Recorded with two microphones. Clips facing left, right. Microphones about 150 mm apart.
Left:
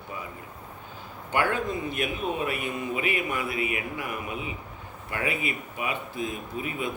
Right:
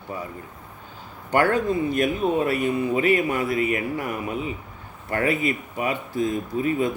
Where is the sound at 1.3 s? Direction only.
40° right (ahead or behind).